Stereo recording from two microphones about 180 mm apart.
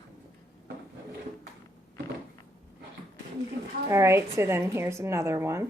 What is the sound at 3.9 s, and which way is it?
Speech, 15° right (ahead or behind).